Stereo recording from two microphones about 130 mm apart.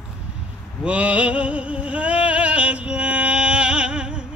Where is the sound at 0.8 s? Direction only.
10° right (ahead or behind).